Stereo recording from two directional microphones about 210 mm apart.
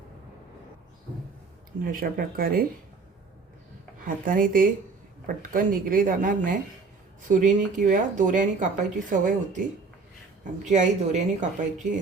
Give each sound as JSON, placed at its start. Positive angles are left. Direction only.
{"t": 1.8, "sound": "speech", "side_deg": -45}
{"t": 4.0, "sound": "speech", "side_deg": -40}
{"t": 10.7, "sound": "speech", "side_deg": -35}